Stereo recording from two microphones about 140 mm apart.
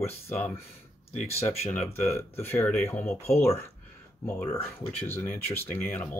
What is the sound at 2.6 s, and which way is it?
Speech, 15° left (ahead or behind).